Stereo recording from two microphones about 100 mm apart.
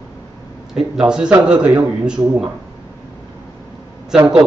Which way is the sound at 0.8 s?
5° right (ahead or behind).